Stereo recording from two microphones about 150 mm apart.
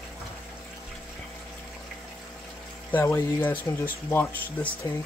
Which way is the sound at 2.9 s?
15° left (ahead or behind).